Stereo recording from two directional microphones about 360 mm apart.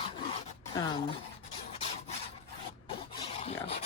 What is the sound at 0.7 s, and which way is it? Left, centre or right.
Speech, centre.